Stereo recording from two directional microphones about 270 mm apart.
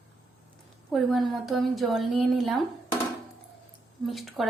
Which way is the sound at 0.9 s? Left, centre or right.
Centre.